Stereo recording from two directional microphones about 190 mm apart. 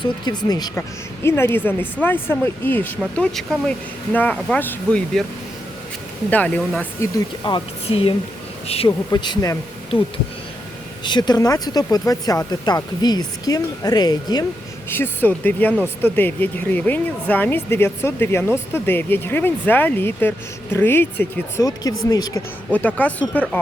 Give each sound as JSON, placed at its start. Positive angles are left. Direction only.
{"t": 0.0, "sound": "speech", "side_deg": 20}
{"t": 3.0, "sound": "speech", "side_deg": 0}
{"t": 6.3, "sound": "speech", "side_deg": 10}
{"t": 7.4, "sound": "speech", "side_deg": 25}
{"t": 11.0, "sound": "speech", "side_deg": 25}
{"t": 14.8, "sound": "speech", "side_deg": 10}
{"t": 22.7, "sound": "speech", "side_deg": 10}